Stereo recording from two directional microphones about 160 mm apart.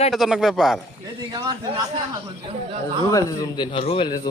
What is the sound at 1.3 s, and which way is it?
Speech, 25° right (ahead or behind).